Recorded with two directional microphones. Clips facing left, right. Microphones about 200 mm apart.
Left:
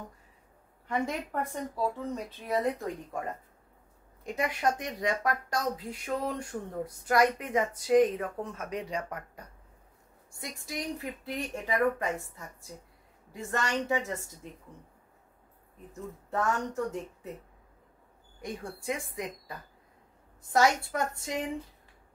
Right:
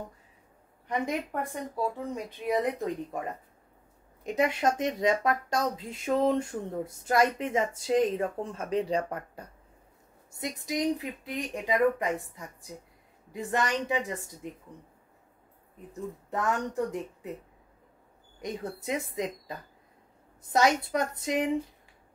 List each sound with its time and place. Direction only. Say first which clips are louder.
0.8 s a woman's voice: right 1 dB; 15° right (ahead or behind)
4.2 s speech: right 4 dB; 20° right (ahead or behind)
10.6 s a woman's voice: right 7 dB; 20° right (ahead or behind)
16.3 s a woman's voice: even; 15° right (ahead or behind)
18.4 s speech: right 3 dB; 20° right (ahead or behind)